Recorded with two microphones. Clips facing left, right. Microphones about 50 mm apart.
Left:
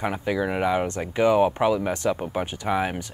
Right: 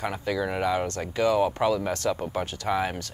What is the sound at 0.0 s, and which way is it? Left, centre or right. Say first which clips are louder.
Speech: left 3 dB; centre.